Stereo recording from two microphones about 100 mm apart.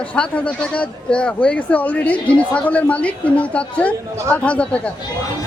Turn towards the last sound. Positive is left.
turn(degrees=10)  # may be behind; listen again after turning